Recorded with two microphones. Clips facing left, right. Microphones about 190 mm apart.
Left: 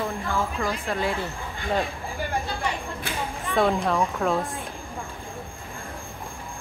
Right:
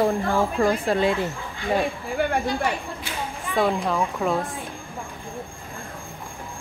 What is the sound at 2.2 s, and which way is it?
Speech, 65° right (ahead or behind).